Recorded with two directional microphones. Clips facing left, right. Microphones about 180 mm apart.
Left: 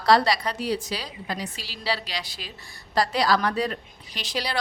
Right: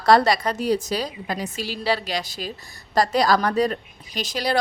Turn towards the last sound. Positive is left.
turn(degrees=-45)  # may be behind; listen again after turning